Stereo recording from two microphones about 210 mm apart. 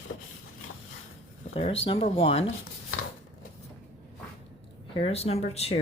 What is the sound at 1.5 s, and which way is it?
Speech, 25° left (ahead or behind).